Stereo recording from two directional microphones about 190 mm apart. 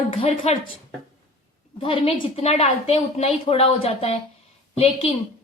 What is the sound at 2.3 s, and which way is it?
A woman's voice, 35° left (ahead or behind).